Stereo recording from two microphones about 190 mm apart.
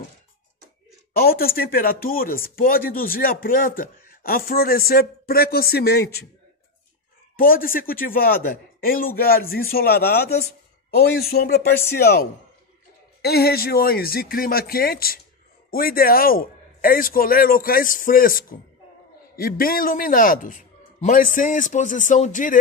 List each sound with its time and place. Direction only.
1.2 s speech: 50° left (ahead or behind)
7.3 s speech: 50° left (ahead or behind)